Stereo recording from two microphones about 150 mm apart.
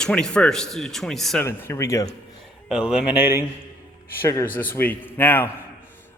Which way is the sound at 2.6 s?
5° right (ahead or behind).